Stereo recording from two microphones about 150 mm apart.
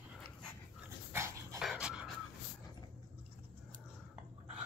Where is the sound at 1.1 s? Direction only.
20° right (ahead or behind).